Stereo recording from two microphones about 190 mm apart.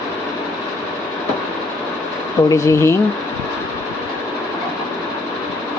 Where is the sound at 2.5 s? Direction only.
15° left (ahead or behind).